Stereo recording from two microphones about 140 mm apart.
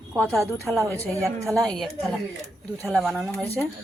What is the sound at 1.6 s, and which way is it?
Speech, centre (ahead or behind).